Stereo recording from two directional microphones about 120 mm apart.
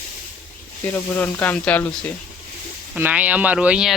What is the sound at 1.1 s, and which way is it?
Speech, 15° left (ahead or behind).